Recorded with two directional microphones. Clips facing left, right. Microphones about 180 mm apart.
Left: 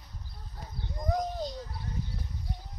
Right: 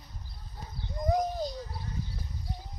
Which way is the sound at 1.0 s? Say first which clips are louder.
Right 3 dB; 5° right (ahead or behind).